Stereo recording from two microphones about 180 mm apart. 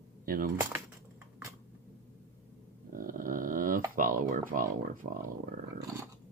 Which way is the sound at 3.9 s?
50° right (ahead or behind).